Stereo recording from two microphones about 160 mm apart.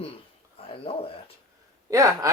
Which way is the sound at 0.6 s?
35° left (ahead or behind).